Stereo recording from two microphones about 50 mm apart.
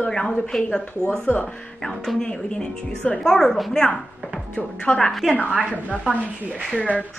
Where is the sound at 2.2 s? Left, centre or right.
Centre.